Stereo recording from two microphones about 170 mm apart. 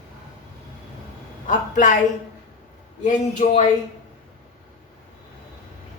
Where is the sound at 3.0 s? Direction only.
45° left (ahead or behind).